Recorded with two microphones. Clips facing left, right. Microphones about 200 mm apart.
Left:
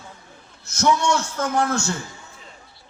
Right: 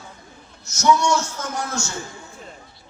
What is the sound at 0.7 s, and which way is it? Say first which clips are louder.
A man's voice: right 1 dB; 60° left (ahead or behind).